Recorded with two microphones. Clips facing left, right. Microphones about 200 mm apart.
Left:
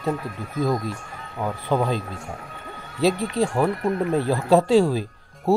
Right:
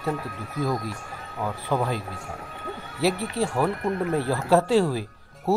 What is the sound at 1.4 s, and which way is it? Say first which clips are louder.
Speech: left 3 dB; 20° left (ahead or behind).